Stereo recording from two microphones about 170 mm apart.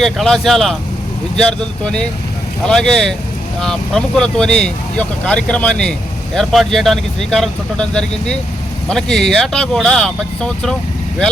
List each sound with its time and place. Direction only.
0.0 s speech: centre (ahead or behind)